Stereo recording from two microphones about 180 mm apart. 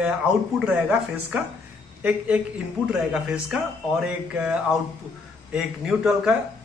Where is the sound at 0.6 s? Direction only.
5° right (ahead or behind).